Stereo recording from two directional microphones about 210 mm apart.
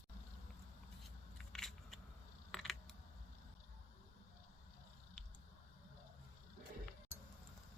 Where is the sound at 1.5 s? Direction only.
Centre (ahead or behind).